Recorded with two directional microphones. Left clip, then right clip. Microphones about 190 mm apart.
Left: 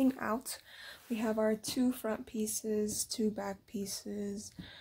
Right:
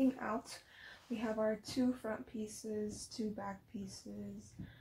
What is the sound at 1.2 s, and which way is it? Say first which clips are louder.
Speech: left 5 dB; 55° left (ahead or behind).